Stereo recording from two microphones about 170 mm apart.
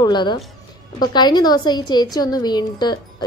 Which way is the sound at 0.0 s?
25° left (ahead or behind).